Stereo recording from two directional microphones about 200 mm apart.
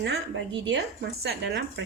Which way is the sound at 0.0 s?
60° right (ahead or behind).